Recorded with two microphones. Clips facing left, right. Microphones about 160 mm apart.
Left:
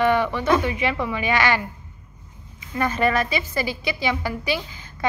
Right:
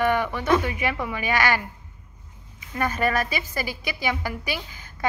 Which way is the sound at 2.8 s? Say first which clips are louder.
Left 3 dB; 45° right (ahead or behind).